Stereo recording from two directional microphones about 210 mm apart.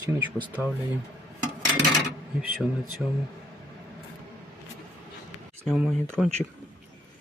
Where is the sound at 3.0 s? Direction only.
Centre (ahead or behind).